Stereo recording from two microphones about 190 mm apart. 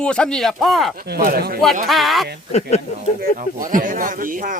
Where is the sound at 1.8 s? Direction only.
Centre (ahead or behind).